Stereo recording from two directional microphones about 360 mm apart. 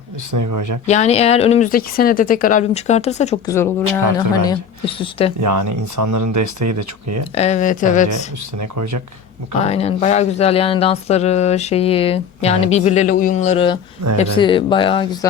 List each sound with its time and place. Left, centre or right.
0.3 s speech: right
0.9 s speech: centre
3.5 s speech: centre
5.4 s speech: right
7.3 s speech: centre
8.1 s speech: right
9.6 s speech: centre